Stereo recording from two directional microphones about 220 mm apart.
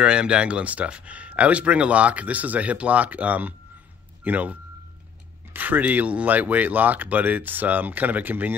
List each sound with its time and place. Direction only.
0.0 s speech: 5° right (ahead or behind)